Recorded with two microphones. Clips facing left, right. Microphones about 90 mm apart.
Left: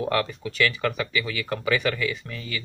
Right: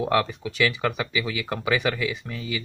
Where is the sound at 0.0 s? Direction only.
15° right (ahead or behind).